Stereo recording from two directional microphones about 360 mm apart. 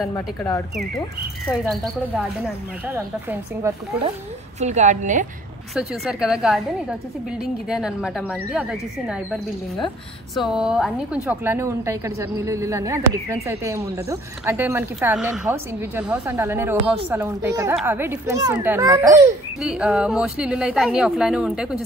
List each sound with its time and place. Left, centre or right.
0.0 s speech: centre
4.6 s a woman's voice: centre
5.8 s speech: centre